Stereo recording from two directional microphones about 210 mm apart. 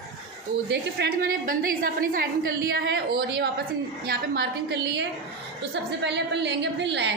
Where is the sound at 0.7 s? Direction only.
55° right (ahead or behind).